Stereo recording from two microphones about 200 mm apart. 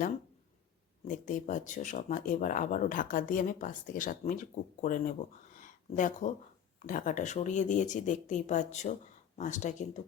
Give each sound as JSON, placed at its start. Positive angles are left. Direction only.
{"t": 1.0, "sound": "speech", "side_deg": 40}
{"t": 5.5, "sound": "a sound", "side_deg": 40}
{"t": 6.8, "sound": "speech", "side_deg": 40}